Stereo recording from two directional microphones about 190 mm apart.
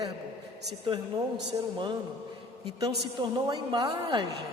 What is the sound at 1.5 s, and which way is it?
Speech, 25° right (ahead or behind).